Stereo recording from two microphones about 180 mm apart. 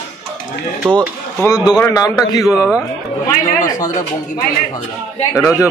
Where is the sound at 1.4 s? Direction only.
20° left (ahead or behind).